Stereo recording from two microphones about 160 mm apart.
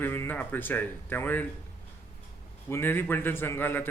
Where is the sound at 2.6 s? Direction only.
15° left (ahead or behind).